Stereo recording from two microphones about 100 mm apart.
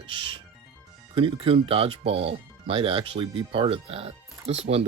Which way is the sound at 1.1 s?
65° right (ahead or behind).